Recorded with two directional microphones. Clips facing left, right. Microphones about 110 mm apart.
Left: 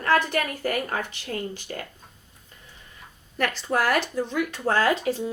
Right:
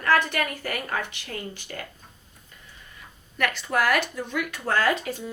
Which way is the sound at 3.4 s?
40° left (ahead or behind).